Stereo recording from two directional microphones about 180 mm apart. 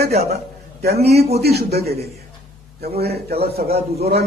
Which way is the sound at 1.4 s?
60° right (ahead or behind).